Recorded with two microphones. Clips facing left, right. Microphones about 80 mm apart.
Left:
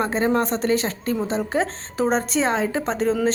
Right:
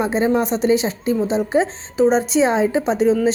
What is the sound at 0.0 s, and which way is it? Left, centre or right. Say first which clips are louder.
Speech: right 3 dB; centre.